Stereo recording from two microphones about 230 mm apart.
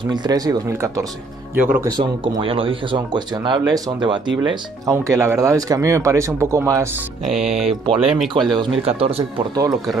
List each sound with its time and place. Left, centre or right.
0.1 s speech: centre
1.9 s speech: centre
7.2 s music: centre
7.6 s speech: right